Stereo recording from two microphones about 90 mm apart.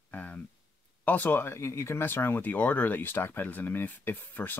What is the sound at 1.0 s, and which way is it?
Speech, 20° left (ahead or behind).